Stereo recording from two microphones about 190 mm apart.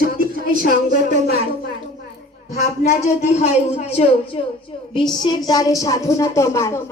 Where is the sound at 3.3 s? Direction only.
35° left (ahead or behind).